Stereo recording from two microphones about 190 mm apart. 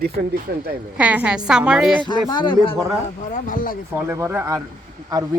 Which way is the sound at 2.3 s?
25° left (ahead or behind).